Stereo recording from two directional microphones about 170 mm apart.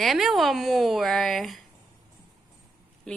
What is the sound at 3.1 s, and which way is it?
Speech, 5° left (ahead or behind).